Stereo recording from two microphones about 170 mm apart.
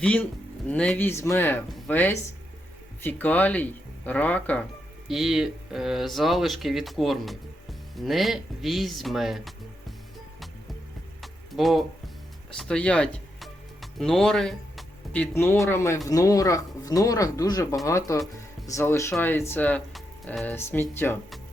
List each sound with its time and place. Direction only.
0.0 s speech: 5° left (ahead or behind)
5.0 s speech: centre (ahead or behind)
11.2 s music: centre (ahead or behind)
15.6 s speech: 15° left (ahead or behind)